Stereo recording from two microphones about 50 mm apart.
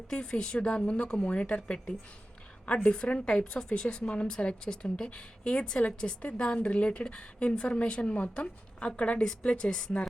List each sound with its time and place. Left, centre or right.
0.1 s a woman's voice: centre